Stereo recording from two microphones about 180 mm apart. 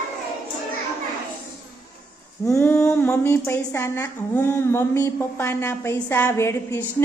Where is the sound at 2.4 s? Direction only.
15° left (ahead or behind).